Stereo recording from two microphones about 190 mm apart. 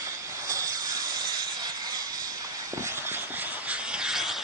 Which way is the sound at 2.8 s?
10° right (ahead or behind).